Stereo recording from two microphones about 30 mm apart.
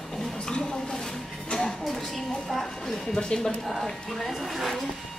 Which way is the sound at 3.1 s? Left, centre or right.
Centre.